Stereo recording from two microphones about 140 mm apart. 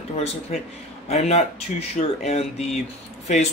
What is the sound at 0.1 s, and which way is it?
A man's voice, 50° left (ahead or behind).